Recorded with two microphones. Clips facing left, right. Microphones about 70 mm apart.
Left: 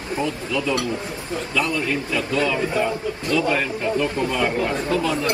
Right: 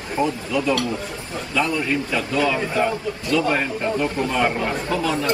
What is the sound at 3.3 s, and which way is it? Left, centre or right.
Speech, right.